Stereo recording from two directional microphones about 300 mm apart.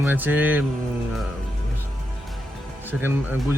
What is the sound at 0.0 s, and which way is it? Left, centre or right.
Speech, centre.